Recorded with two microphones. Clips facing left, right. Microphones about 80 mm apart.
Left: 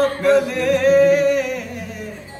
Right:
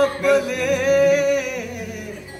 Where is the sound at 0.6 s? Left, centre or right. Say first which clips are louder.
Left 4 dB; centre.